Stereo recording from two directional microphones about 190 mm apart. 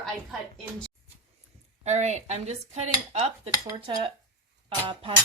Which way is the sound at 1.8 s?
35° right (ahead or behind).